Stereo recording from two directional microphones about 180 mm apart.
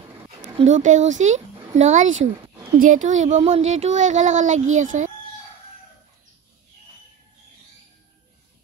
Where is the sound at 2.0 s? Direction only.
90° right.